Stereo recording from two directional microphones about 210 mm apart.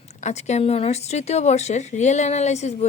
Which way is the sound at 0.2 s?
35° left (ahead or behind).